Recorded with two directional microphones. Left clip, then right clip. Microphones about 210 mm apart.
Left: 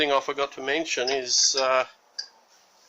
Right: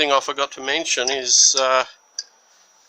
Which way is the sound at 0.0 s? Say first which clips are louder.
Right 5 dB; 35° right (ahead or behind).